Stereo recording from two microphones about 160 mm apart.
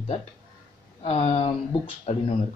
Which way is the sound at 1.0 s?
40° left (ahead or behind).